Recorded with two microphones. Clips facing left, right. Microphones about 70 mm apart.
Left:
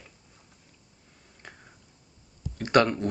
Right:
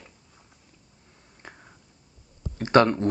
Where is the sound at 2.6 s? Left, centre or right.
Right.